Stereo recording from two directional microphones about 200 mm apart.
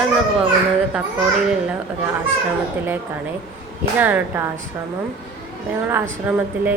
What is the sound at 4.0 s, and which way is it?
Speech, 10° right (ahead or behind).